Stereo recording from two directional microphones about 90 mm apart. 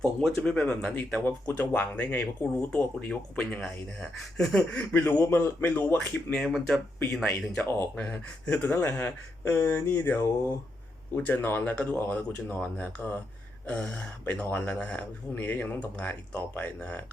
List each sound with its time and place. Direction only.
0.0 s speech: 5° left (ahead or behind)
4.8 s speech: 25° left (ahead or behind)
6.3 s speech: 5° left (ahead or behind)